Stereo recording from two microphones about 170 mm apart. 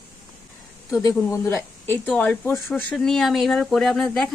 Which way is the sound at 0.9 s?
20° left (ahead or behind).